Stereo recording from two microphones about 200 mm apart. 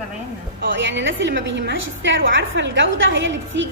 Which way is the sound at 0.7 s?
65° right (ahead or behind).